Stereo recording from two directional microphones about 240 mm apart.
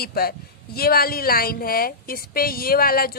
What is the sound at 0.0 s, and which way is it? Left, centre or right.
Speech, left.